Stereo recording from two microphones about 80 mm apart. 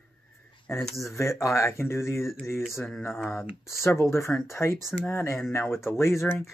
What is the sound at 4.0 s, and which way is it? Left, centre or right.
Speech, left.